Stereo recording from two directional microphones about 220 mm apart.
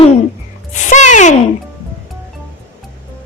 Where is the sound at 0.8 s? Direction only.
35° left (ahead or behind).